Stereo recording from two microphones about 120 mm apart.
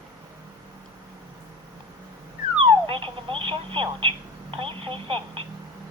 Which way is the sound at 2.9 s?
45° right (ahead or behind).